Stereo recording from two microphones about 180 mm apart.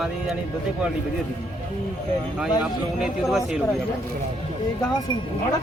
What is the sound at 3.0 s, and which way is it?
Speech, centre (ahead or behind).